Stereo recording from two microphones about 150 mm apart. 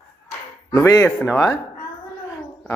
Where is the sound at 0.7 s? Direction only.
20° left (ahead or behind).